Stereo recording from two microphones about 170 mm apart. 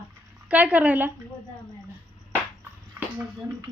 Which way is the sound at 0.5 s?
10° right (ahead or behind).